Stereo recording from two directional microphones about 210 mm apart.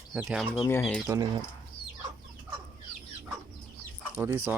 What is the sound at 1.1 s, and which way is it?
Speech, 20° right (ahead or behind).